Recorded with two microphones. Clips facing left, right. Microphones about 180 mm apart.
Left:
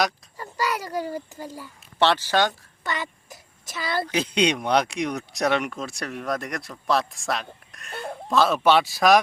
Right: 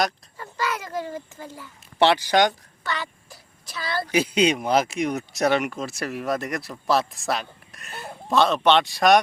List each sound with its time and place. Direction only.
0.6 s a sound: 35° left (ahead or behind)
1.5 s a child's voice: 10° left (ahead or behind)
2.0 s speech: 15° right (ahead or behind)
2.8 s a child's voice: 20° left (ahead or behind)
4.1 s speech: 10° right (ahead or behind)